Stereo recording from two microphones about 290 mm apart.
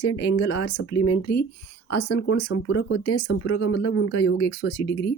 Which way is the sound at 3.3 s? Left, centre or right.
Left.